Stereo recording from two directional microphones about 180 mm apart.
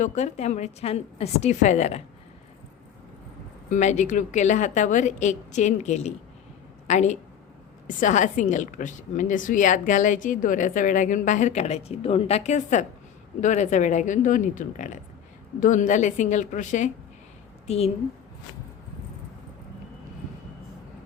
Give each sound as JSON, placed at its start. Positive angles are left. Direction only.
{"t": 0.0, "sound": "a woman's voice", "side_deg": 40}
{"t": 3.7, "sound": "a woman's voice", "side_deg": 40}